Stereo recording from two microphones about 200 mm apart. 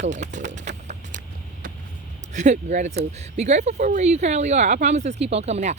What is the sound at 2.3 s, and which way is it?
Speech, 35° right (ahead or behind).